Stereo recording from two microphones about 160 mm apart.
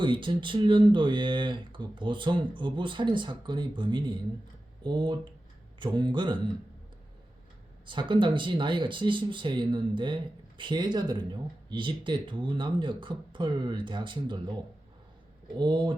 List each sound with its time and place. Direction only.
0.0 s speech: 30° right (ahead or behind)
7.9 s speech: 30° right (ahead or behind)